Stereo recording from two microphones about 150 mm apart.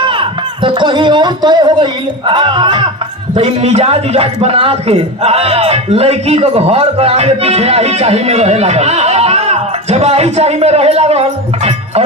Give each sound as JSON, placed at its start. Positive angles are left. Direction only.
{"t": 0.0, "sound": "speech", "side_deg": -35}
{"t": 3.3, "sound": "a man's voice", "side_deg": -45}